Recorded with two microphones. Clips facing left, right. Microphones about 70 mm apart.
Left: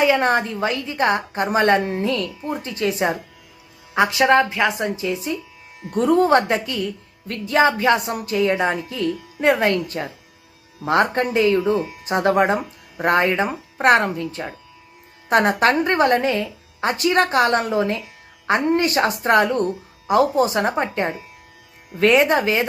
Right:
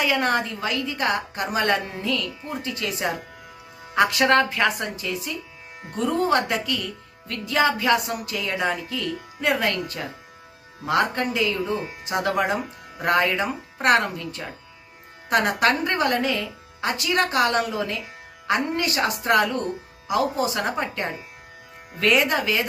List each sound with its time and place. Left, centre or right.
0.0 s a woman's voice: left
3.9 s speech: centre
4.9 s speech: left
6.0 s a woman's voice: left